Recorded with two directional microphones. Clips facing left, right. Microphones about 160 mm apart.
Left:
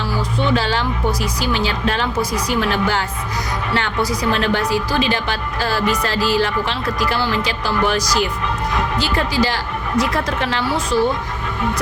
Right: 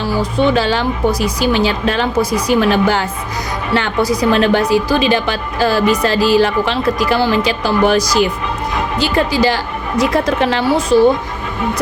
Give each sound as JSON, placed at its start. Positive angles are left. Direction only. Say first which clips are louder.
{"t": 0.2, "sound": "speech", "louder": "right 5 dB", "side_deg": -15}
{"t": 10.9, "sound": "speech", "louder": "right 8 dB", "side_deg": -50}